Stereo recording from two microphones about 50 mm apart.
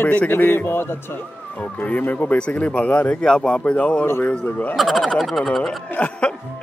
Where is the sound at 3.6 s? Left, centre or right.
Left.